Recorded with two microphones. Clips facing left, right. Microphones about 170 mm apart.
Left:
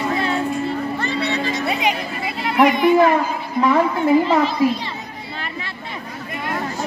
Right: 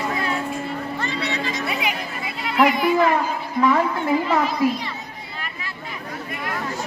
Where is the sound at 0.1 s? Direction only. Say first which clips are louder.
Left 4 dB; 30° left (ahead or behind).